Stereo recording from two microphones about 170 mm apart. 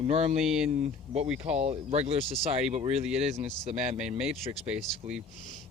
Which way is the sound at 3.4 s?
40° right (ahead or behind).